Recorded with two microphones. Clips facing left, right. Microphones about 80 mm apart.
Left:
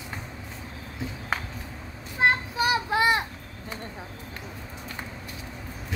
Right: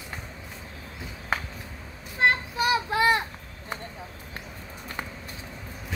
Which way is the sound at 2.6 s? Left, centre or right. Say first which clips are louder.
Even; left.